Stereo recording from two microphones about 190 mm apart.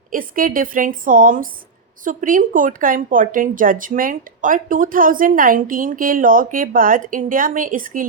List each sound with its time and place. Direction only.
0.1 s speech: 45° right (ahead or behind)